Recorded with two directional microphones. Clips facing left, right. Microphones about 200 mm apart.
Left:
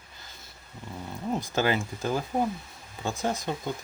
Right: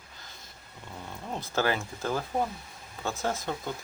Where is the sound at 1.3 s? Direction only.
15° left (ahead or behind).